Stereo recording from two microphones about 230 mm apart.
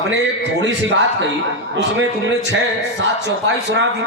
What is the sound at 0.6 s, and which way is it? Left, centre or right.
Speech, right.